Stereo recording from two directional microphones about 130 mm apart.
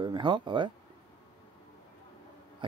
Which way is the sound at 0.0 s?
35° right (ahead or behind).